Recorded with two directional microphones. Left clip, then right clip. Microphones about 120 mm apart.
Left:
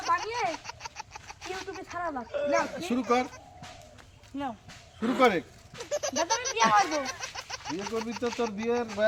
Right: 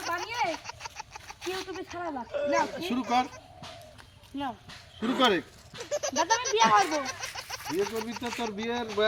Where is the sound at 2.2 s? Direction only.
Centre (ahead or behind).